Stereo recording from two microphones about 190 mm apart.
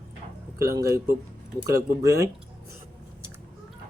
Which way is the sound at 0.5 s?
15° right (ahead or behind).